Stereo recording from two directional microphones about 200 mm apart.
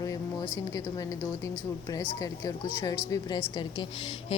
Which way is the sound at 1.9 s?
15° left (ahead or behind).